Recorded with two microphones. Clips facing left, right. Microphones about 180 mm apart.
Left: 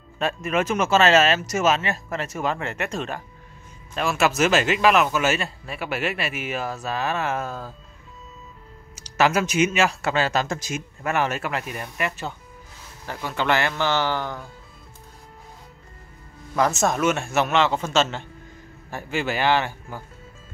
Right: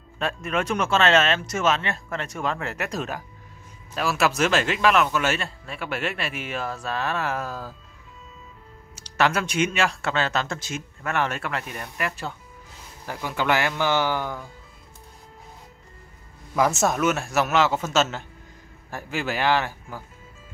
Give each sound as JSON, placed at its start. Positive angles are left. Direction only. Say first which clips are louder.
{"t": 0.2, "sound": "speech", "louder": "left 3 dB", "side_deg": 5}
{"t": 9.1, "sound": "a man's voice", "louder": "left 3 dB", "side_deg": 5}
{"t": 16.8, "sound": "speech", "louder": "left 1 dB", "side_deg": -5}